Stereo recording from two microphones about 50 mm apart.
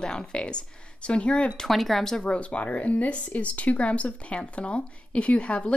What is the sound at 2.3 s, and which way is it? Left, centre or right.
Speech, left.